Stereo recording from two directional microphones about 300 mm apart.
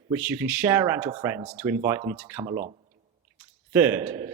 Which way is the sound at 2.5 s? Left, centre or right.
Right.